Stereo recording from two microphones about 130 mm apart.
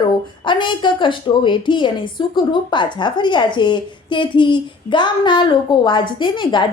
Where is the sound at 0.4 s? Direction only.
35° left (ahead or behind).